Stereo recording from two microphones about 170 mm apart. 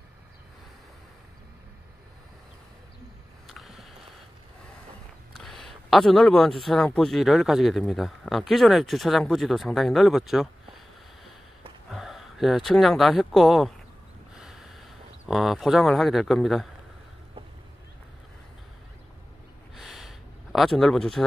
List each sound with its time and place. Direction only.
3.4 s boat: centre (ahead or behind)
5.3 s speech: centre (ahead or behind)
11.9 s speech: centre (ahead or behind)
14.3 s snort: centre (ahead or behind)
15.2 s speech: centre (ahead or behind)
19.7 s a sound: centre (ahead or behind)